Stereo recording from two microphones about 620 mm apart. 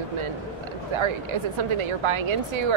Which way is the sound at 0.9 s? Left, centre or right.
Right.